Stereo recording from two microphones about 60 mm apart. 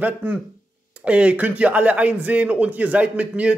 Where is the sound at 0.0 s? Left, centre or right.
Right.